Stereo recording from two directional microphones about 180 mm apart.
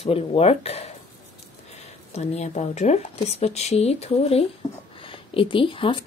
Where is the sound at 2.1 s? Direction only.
40° left (ahead or behind).